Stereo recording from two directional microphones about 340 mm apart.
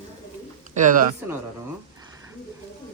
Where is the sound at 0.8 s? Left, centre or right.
Right.